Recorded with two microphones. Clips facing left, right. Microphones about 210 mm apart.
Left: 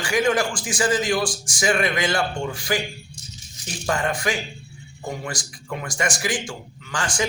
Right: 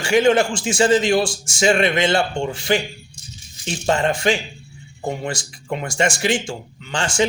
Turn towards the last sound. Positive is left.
turn(degrees=-25)  # may be behind; listen again after turning